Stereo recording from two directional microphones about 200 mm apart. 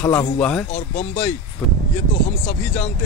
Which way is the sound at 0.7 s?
35° left (ahead or behind).